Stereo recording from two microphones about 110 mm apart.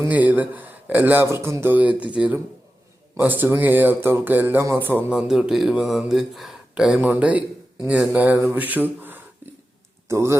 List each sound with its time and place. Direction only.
0.0 s a man's voice: 15° right (ahead or behind)
5.1 s speech: 5° right (ahead or behind); by 10.3 s 25° right (ahead or behind)